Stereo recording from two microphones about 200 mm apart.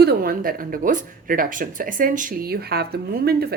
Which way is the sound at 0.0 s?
45° right (ahead or behind).